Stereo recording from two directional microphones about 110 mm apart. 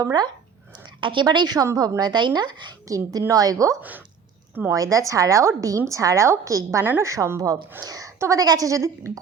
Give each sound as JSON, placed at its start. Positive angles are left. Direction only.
{"t": 0.0, "sound": "a woman's voice", "side_deg": -40}
{"t": 3.8, "sound": "a woman's voice", "side_deg": -15}
{"t": 4.7, "sound": "a woman's voice", "side_deg": -30}